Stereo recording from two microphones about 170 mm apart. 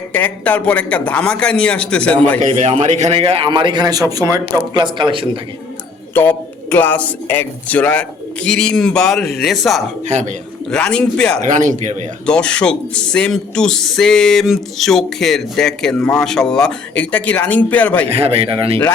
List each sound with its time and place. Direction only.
0.1 s speech: 10° left (ahead or behind)
2.4 s a man's voice: 40° right (ahead or behind)
6.1 s speech: 10° left (ahead or behind)
10.1 s speech: 45° right (ahead or behind)
10.7 s speech: 5° left (ahead or behind)
11.4 s speech: 50° right (ahead or behind)
12.2 s speech: 5° left (ahead or behind)
18.1 s a man's voice: 35° right (ahead or behind)